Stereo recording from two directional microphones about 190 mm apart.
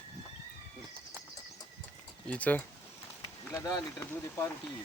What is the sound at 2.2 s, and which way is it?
Speech, 5° left (ahead or behind).